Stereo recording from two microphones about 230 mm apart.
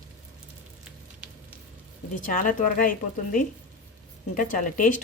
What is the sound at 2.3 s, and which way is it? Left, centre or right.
Speech, left.